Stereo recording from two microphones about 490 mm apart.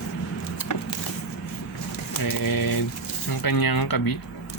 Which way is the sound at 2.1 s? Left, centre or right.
Left.